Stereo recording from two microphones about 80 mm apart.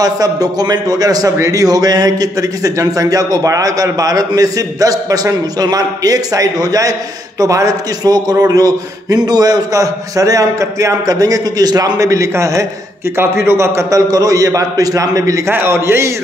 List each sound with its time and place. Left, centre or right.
0.0 s a man's voice: right
15.5 s a man's voice: right